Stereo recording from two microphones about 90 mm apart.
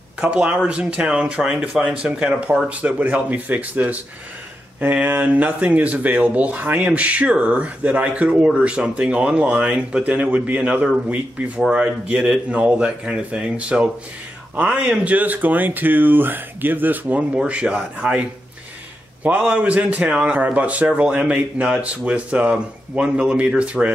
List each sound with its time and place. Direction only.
0.2 s speech: 15° right (ahead or behind)
19.2 s speech: 15° right (ahead or behind)